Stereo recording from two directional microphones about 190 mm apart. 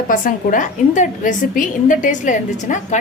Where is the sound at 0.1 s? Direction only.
45° left (ahead or behind).